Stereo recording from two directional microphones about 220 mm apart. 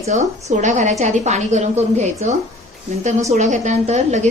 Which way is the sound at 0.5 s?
35° right (ahead or behind).